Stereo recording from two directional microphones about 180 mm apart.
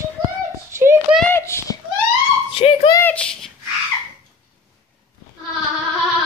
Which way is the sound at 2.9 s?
15° left (ahead or behind).